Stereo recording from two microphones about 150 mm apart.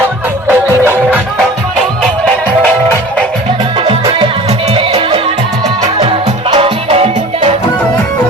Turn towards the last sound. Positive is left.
turn(degrees=-45)  # may be behind; listen again after turning